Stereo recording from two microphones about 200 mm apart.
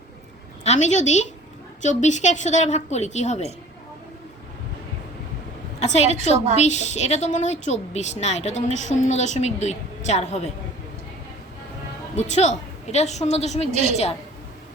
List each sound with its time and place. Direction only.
0.6 s a woman's voice: 35° left (ahead or behind)
5.8 s a woman's voice: 35° left (ahead or behind)
6.3 s a woman's voice: 35° right (ahead or behind)
6.6 s a woman's voice: 35° left (ahead or behind)
12.1 s a woman's voice: 35° left (ahead or behind)
13.7 s a woman's voice: 30° right (ahead or behind)
13.9 s a woman's voice: 30° left (ahead or behind)